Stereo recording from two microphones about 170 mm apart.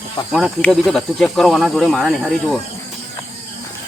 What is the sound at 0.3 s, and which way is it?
Speech, centre (ahead or behind).